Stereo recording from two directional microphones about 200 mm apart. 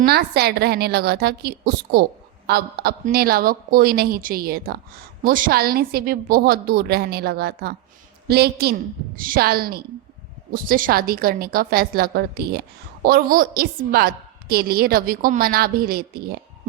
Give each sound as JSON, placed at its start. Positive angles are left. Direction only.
{"t": 0.0, "sound": "a woman's voice", "side_deg": -50}